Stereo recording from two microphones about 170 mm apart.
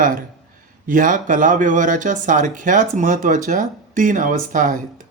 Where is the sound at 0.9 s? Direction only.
50° right (ahead or behind).